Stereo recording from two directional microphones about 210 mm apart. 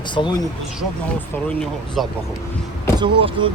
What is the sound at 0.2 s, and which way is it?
Speech, 25° left (ahead or behind).